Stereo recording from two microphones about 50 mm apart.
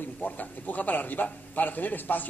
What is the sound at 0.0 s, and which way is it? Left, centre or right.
Speech, left.